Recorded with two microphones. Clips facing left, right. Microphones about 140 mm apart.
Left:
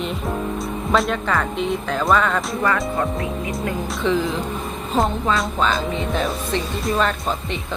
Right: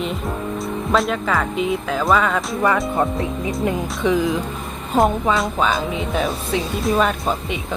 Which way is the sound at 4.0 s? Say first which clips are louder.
Right 2 dB; 15° right (ahead or behind).